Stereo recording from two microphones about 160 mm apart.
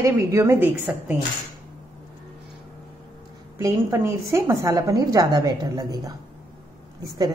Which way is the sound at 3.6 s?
15° right (ahead or behind).